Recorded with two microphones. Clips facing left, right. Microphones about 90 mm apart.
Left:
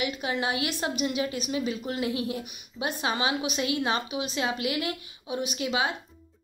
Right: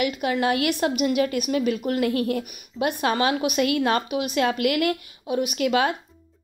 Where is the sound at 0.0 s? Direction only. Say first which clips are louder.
Right 6 dB; 50° right (ahead or behind).